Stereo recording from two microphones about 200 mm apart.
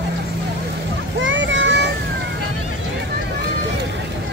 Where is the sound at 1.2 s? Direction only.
70° right (ahead or behind).